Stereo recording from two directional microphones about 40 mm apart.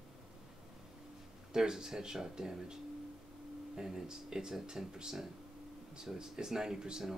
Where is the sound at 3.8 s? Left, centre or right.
Centre.